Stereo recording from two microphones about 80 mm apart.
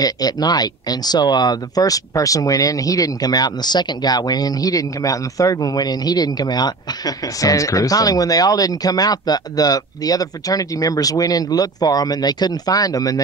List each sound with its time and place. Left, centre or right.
0.0 s speech: left